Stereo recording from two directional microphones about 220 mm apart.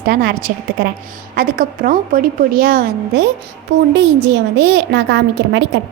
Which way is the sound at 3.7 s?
55° right (ahead or behind).